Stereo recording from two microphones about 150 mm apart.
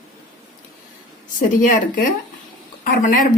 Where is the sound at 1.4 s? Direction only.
65° left (ahead or behind).